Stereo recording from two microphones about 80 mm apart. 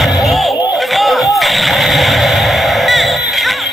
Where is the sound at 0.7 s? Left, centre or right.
Centre.